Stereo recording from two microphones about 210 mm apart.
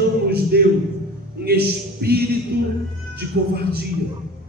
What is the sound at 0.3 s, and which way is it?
Music, 50° right (ahead or behind).